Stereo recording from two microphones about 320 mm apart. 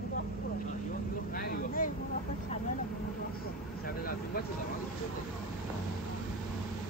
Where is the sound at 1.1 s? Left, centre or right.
Left.